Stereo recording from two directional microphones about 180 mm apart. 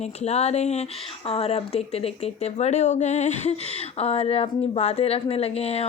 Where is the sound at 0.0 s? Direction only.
35° left (ahead or behind).